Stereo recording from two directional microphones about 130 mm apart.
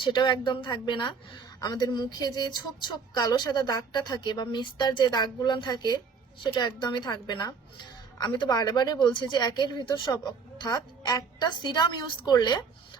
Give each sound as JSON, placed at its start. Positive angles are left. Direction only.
{"t": 0.0, "sound": "a woman's voice", "side_deg": 35}